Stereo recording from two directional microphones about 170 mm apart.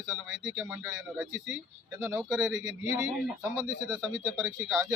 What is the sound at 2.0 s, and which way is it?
Speech, 15° right (ahead or behind).